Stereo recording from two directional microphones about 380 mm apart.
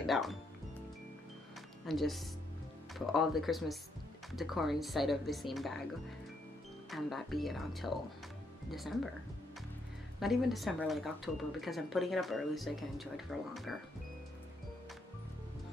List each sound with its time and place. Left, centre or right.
0.0 s speech: centre
1.9 s speech: centre
6.9 s speech: centre
10.2 s speech: centre